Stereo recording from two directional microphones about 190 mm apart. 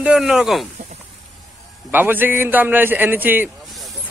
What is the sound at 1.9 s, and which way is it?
A man's voice, 10° right (ahead or behind).